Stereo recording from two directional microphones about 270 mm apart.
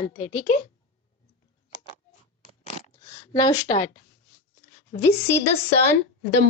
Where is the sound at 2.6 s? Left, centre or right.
Left.